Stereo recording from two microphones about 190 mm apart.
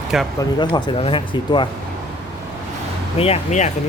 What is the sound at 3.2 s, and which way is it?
Speech, 35° left (ahead or behind).